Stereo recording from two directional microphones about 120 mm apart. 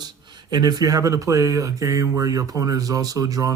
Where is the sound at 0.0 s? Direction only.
35° right (ahead or behind).